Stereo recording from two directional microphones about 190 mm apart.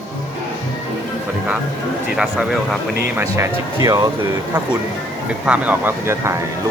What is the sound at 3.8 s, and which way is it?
Speech, 20° right (ahead or behind).